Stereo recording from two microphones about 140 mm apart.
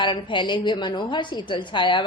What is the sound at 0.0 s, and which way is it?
A woman's voice, 35° left (ahead or behind).